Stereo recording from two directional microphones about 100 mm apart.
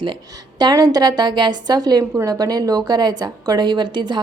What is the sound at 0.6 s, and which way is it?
A woman's voice, 40° right (ahead or behind).